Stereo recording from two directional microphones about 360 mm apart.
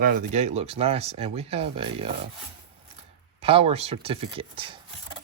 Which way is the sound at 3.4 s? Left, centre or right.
Centre.